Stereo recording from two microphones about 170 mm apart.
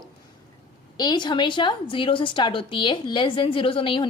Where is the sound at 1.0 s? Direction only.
25° left (ahead or behind).